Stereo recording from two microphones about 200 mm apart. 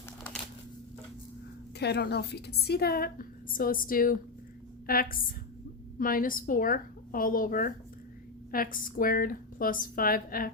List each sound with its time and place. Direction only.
1.8 s a woman's voice: 55° left (ahead or behind)